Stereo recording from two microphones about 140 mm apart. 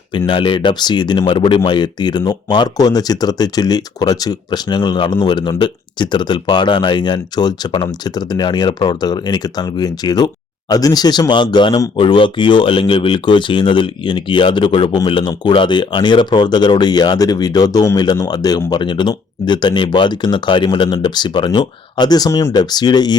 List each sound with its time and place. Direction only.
0.3 s speech: 35° left (ahead or behind)